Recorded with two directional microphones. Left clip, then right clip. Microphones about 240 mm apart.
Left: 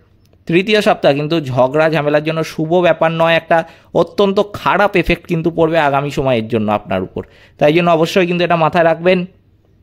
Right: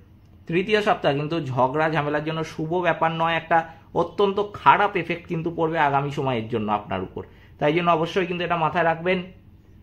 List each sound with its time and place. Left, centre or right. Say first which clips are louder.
0.5 s speech: left 8 dB; left